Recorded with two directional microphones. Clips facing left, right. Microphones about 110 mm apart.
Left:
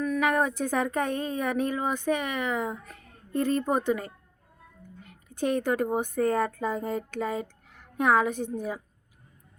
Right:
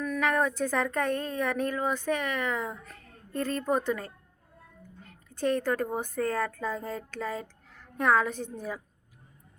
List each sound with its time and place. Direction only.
0.0 s a woman's voice: 10° left (ahead or behind)